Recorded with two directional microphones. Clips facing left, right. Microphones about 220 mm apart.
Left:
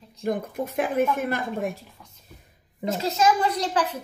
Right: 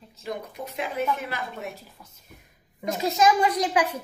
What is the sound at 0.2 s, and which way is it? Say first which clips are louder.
A woman's voice: left 7 dB; 50° left (ahead or behind).